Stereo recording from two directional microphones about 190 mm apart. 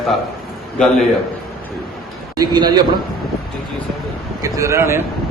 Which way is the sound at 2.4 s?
20° right (ahead or behind).